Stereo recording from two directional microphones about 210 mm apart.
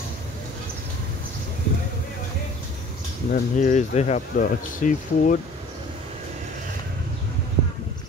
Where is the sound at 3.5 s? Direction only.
35° left (ahead or behind).